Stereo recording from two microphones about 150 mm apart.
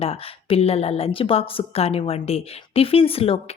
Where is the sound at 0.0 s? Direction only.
40° left (ahead or behind).